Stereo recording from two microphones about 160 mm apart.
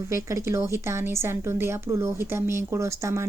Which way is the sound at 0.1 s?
15° right (ahead or behind).